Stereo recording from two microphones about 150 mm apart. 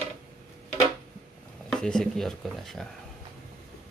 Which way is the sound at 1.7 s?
5° left (ahead or behind).